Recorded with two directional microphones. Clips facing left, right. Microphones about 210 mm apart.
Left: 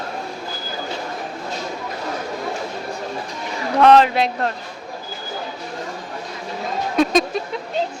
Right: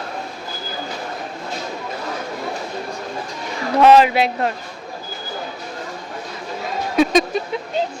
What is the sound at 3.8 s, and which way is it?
Speech, 5° right (ahead or behind).